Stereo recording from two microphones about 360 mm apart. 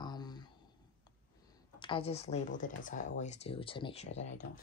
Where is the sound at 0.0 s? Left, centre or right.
Centre.